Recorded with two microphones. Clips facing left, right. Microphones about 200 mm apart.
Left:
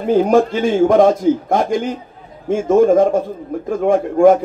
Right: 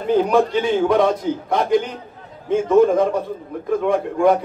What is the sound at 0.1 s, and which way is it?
A man's voice, 45° left (ahead or behind).